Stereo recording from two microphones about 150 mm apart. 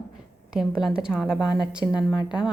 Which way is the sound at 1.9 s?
30° left (ahead or behind).